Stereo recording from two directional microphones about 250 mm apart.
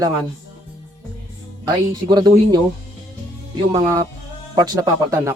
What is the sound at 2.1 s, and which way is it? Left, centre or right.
Speech, centre.